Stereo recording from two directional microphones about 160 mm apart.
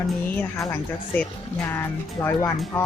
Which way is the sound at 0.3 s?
15° left (ahead or behind).